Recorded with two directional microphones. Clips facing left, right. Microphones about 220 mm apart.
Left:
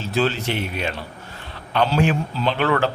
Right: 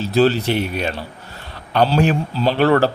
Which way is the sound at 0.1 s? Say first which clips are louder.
Right 6 dB; 35° right (ahead or behind).